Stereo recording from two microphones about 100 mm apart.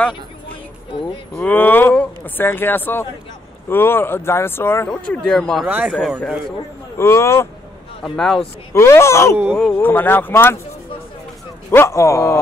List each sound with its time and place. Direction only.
1.4 s speech: 20° left (ahead or behind)
4.8 s speech: 5° left (ahead or behind)
7.0 s speech: 25° left (ahead or behind)
8.0 s speech: 5° left (ahead or behind)
8.7 s speech: 30° left (ahead or behind)
9.7 s speech: 20° left (ahead or behind)
11.7 s speech: 25° left (ahead or behind)